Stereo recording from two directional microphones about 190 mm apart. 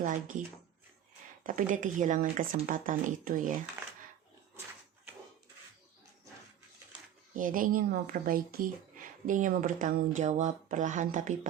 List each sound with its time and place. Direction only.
0.0 s speech: 45° right (ahead or behind)
1.5 s speech: 45° right (ahead or behind)
7.3 s speech: 45° right (ahead or behind)